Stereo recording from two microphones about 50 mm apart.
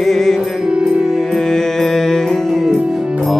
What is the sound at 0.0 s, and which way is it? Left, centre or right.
Music, centre.